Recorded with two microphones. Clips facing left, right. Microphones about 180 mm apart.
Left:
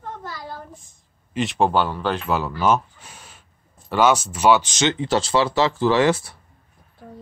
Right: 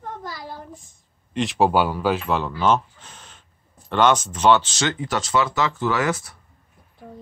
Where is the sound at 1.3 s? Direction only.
Centre (ahead or behind); by 6.4 s 30° left (ahead or behind).